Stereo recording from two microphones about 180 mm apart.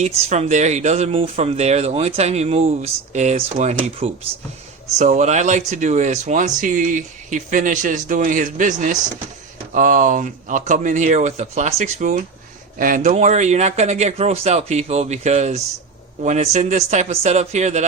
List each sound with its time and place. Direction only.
0.0 s speech: 40° right (ahead or behind)